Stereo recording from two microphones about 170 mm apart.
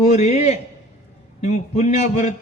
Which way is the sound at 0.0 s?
40° left (ahead or behind).